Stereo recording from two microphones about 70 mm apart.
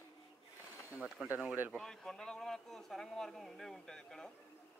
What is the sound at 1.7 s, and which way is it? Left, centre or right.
A man's voice, centre.